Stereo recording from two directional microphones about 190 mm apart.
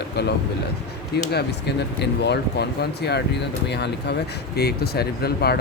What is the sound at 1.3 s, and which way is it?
Speech, 60° left (ahead or behind).